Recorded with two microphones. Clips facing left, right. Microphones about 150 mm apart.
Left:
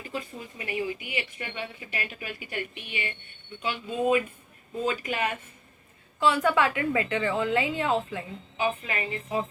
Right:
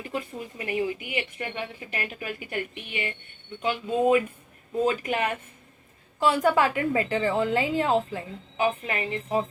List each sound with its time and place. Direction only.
0.6 s a woman's voice: 45° right (ahead or behind)